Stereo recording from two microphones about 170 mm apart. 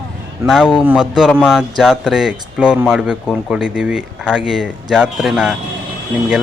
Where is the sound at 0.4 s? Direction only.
Centre (ahead or behind).